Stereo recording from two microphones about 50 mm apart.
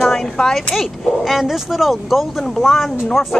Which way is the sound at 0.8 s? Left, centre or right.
Centre.